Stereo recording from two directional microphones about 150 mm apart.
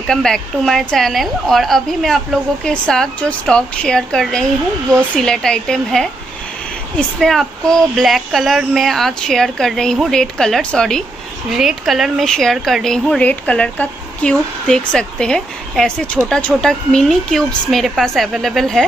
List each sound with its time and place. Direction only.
0.1 s a woman's voice: 5° left (ahead or behind)